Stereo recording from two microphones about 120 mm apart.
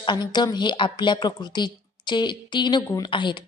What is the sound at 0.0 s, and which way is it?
A woman's voice, 40° left (ahead or behind).